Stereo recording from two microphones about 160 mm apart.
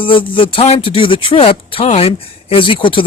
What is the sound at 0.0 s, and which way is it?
Speech, 35° left (ahead or behind).